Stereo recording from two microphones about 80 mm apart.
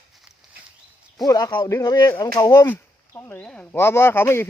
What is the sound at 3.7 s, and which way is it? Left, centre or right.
Speech, left.